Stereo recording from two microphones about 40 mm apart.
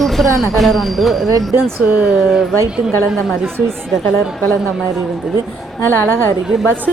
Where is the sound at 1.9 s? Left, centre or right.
Right.